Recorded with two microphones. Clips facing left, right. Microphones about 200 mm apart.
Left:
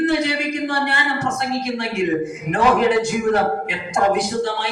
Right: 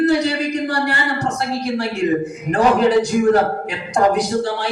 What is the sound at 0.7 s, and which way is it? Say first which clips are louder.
Speech: right 2 dB; 35° right (ahead or behind).